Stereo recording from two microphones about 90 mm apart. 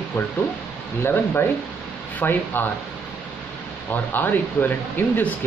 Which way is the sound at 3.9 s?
20° left (ahead or behind).